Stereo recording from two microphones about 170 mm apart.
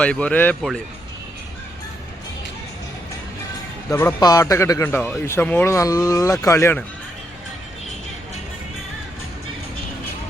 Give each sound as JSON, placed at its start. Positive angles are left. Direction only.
{"t": 0.0, "sound": "speech", "side_deg": 5}
{"t": 3.8, "sound": "speech", "side_deg": 15}